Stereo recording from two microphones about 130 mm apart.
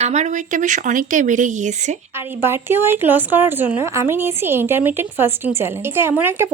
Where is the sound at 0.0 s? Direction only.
60° right (ahead or behind).